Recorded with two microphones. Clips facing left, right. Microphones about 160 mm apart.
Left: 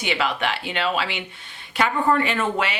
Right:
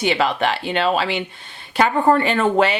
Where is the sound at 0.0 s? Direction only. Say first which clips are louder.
Right 5 dB; 35° right (ahead or behind).